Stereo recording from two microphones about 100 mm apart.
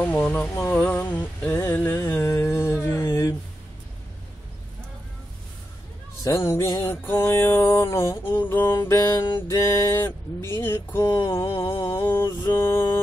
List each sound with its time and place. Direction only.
0.0 s speech: 15° left (ahead or behind)
0.6 s mantra: 20° left (ahead or behind)
1.2 s a sound: 20° left (ahead or behind)
6.2 s mantra: 30° left (ahead or behind)
8.8 s mantra: 30° left (ahead or behind)
9.5 s a sound: 25° left (ahead or behind)
11.9 s mantra: 25° left (ahead or behind)